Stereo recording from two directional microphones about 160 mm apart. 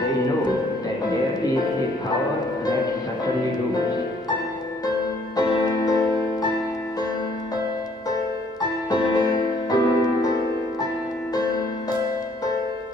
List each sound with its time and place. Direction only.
4.8 s music: 25° left (ahead or behind)
8.1 s music: 25° left (ahead or behind)
11.3 s music: 25° left (ahead or behind)